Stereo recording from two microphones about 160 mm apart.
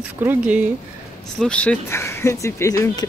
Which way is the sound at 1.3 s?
5° left (ahead or behind).